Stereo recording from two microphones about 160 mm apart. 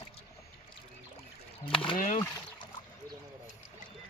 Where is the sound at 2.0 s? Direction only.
55° left (ahead or behind).